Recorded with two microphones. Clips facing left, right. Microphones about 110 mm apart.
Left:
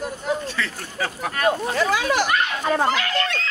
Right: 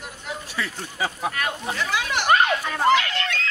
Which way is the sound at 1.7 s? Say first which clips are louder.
Left 5 dB; 40° left (ahead or behind).